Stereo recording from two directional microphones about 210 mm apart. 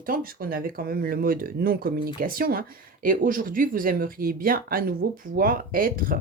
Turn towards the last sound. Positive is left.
turn(degrees=-45)  # may be behind; listen again after turning